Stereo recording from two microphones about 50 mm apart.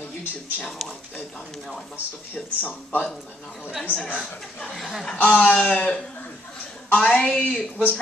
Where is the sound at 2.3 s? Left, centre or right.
Left.